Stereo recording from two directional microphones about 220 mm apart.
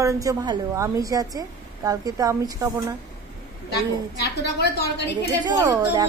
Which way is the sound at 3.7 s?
50° left (ahead or behind).